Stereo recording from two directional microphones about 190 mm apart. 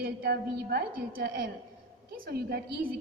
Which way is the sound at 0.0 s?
55° right (ahead or behind).